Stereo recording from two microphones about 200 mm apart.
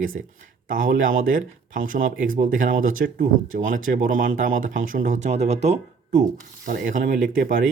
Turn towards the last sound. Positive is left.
turn(degrees=-40)  # may be behind; listen again after turning